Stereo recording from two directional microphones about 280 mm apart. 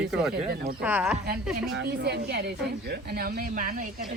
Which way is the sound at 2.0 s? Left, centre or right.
Right.